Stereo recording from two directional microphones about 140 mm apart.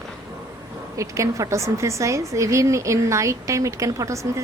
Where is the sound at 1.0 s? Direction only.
20° right (ahead or behind).